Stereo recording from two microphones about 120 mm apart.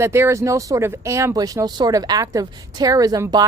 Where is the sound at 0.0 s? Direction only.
20° right (ahead or behind).